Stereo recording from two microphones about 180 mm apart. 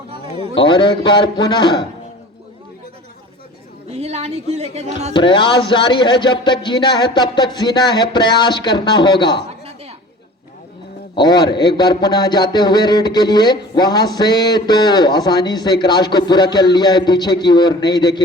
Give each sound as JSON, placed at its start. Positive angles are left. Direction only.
{"t": 0.6, "sound": "a man's voice", "side_deg": 25}
{"t": 3.9, "sound": "a woman's voice", "side_deg": -35}
{"t": 5.1, "sound": "a man's voice", "side_deg": 25}
{"t": 11.1, "sound": "a man's voice", "side_deg": 25}